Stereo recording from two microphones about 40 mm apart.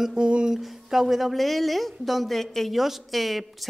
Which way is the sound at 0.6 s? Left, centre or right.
Centre.